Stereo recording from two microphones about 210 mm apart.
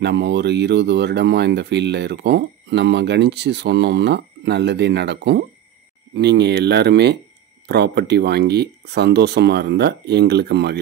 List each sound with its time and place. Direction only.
0.0 s speech: 55° right (ahead or behind)